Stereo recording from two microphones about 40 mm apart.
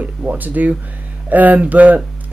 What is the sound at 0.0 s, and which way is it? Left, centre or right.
Speech, right.